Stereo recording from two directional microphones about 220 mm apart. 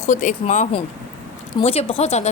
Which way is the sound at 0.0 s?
35° left (ahead or behind).